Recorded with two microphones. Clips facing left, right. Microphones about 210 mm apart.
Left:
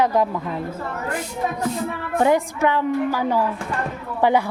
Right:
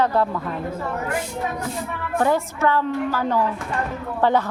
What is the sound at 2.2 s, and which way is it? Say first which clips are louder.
A woman's voice: left 2 dB; 15° left (ahead or behind).